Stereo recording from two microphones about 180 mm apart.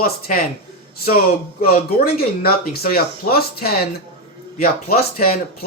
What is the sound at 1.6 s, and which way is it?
Speech, 55° left (ahead or behind).